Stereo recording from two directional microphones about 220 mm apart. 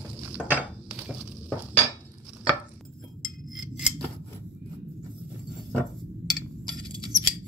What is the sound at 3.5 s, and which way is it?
Scissors, centre (ahead or behind).